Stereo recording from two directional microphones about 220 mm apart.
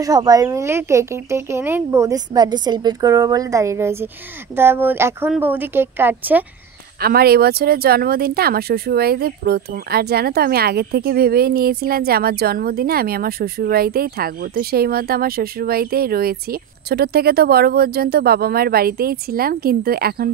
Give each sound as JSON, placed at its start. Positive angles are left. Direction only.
{"t": 0.0, "sound": "speech", "side_deg": -15}
{"t": 7.0, "sound": "speech", "side_deg": -45}